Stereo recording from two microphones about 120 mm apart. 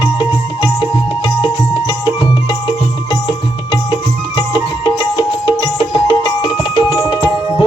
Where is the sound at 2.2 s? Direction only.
45° left (ahead or behind).